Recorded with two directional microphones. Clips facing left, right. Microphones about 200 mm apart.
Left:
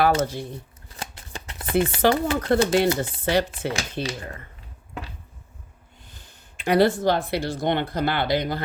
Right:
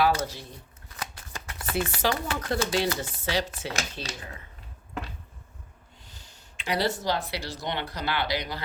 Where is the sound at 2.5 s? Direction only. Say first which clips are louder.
Left 7 dB; 55° left (ahead or behind).